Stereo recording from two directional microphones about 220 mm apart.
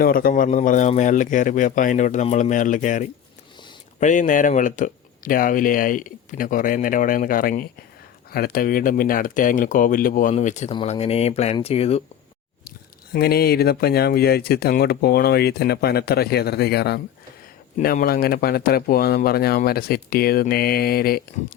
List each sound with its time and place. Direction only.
0.0 s speech: 40° left (ahead or behind)
13.1 s speech: 45° left (ahead or behind)